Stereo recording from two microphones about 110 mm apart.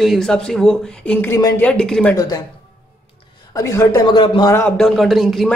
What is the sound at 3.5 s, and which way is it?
Speech, 30° left (ahead or behind).